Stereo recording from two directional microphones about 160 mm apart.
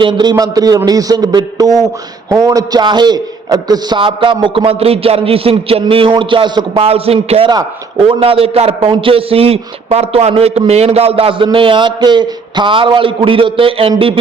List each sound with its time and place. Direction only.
0.0 s a man's voice: 30° right (ahead or behind)